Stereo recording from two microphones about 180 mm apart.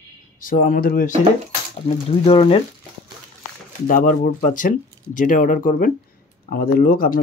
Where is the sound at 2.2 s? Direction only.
30° left (ahead or behind).